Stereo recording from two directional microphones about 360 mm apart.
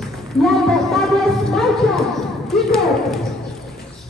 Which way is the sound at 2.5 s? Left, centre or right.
Centre.